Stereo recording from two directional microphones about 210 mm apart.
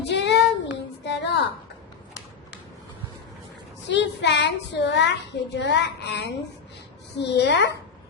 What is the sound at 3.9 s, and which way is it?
A child's voice, 55° left (ahead or behind).